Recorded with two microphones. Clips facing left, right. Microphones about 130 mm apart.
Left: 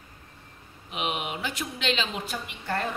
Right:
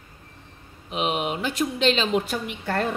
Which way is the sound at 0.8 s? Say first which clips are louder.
Right 6 dB; 35° right (ahead or behind).